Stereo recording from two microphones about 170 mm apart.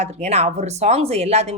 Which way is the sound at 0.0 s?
40° right (ahead or behind).